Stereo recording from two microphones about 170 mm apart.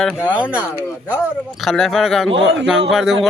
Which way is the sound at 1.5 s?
Centre (ahead or behind).